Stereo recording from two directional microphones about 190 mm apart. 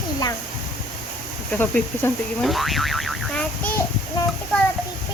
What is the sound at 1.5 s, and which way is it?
Speech, 10° left (ahead or behind).